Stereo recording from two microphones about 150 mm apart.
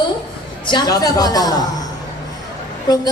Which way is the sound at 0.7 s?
25° left (ahead or behind).